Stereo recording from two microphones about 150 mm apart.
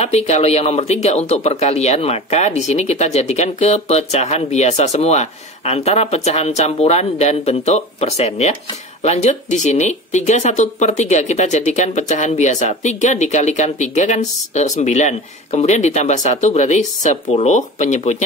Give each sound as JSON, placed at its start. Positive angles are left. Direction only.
{"t": 0.0, "sound": "speech", "side_deg": 45}